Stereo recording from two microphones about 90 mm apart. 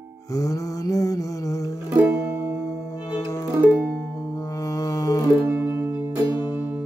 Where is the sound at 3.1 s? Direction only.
45° left (ahead or behind).